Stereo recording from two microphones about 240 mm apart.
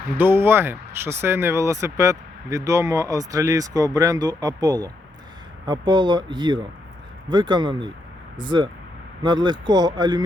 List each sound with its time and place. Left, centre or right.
0.2 s speech: centre